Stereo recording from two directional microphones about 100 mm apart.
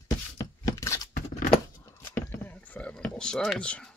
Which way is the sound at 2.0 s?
20° left (ahead or behind).